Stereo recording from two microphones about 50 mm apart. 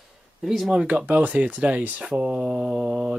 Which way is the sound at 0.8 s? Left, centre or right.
Right.